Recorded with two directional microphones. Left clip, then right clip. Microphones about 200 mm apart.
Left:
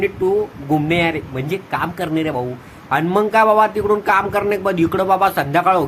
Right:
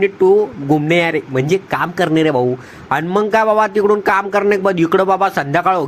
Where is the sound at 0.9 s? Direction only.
30° right (ahead or behind).